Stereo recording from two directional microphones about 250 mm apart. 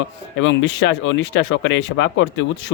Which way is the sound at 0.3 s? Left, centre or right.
Left.